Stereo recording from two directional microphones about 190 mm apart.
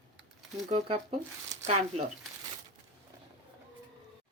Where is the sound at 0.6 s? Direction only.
35° right (ahead or behind).